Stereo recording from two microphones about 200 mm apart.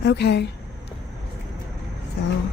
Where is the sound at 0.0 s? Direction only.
55° left (ahead or behind).